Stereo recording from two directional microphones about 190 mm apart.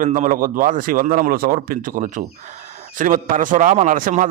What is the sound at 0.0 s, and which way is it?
A man's voice, 45° right (ahead or behind).